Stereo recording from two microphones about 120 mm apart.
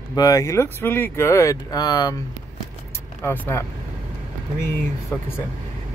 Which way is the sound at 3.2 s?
15° left (ahead or behind).